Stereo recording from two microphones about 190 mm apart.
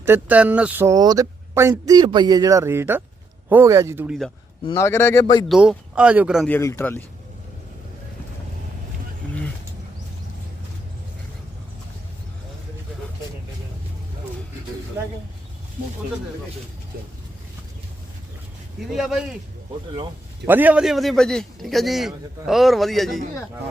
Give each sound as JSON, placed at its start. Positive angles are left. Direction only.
{"t": 0.0, "sound": "speech", "side_deg": -10}
{"t": 4.6, "sound": "a man's voice", "side_deg": 20}
{"t": 5.5, "sound": "a man's voice", "side_deg": -5}
{"t": 6.5, "sound": "a man's voice", "side_deg": 10}
{"t": 9.2, "sound": "a sound", "side_deg": 5}
{"t": 18.9, "sound": "a man's voice", "side_deg": 0}
{"t": 20.4, "sound": "a man's voice", "side_deg": -10}